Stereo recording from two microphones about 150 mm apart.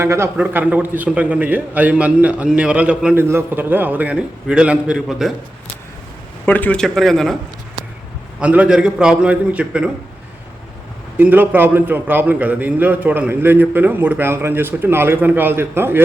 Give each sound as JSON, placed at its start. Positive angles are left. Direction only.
{"t": 0.0, "sound": "a man's voice", "side_deg": -20}
{"t": 0.3, "sound": "a man's voice", "side_deg": -10}
{"t": 6.4, "sound": "speech", "side_deg": 10}
{"t": 8.4, "sound": "a man's voice", "side_deg": -10}
{"t": 11.2, "sound": "a man's voice", "side_deg": -10}